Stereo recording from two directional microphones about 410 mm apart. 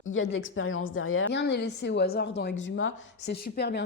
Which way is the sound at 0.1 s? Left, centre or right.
Left.